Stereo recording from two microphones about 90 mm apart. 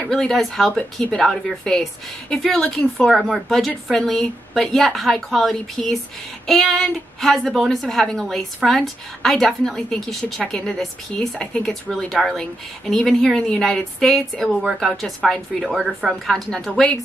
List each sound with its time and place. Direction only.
0.0 s a woman's voice: 5° left (ahead or behind)
14.6 s speech: 5° right (ahead or behind)
14.9 s a woman's voice: 5° left (ahead or behind)